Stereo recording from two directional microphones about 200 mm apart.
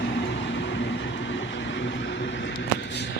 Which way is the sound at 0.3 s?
60° left (ahead or behind).